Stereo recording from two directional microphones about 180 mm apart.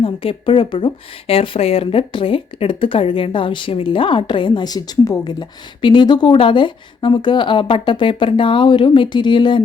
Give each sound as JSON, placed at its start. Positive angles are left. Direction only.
{"t": 0.0, "sound": "speech", "side_deg": 30}